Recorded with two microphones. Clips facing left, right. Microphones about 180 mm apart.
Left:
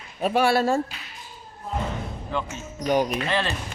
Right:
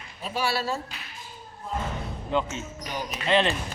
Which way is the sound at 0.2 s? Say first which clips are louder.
Left 8 dB; 60° left (ahead or behind).